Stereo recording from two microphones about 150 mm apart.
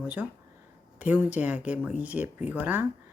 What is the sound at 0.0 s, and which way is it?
Speech, 10° right (ahead or behind).